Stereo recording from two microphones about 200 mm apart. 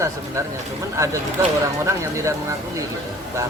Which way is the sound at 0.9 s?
15° right (ahead or behind).